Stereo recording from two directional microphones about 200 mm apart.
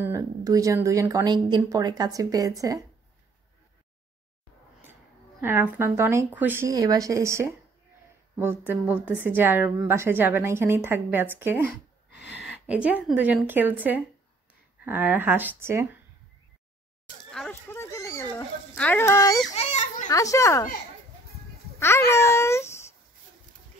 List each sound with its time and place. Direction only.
0.0 s speech: 15° right (ahead or behind)
5.4 s speech: 10° right (ahead or behind)
12.1 s a sound: 60° left (ahead or behind)
12.4 s speech: 5° right (ahead or behind)
17.3 s dog: 5° left (ahead or behind)
19.5 s children playing: 35° left (ahead or behind)
20.1 s speech: 15° left (ahead or behind)
21.7 s a child's voice: 15° left (ahead or behind)